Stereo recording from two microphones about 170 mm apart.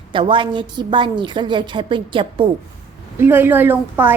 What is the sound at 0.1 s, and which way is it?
A woman's voice, 30° right (ahead or behind).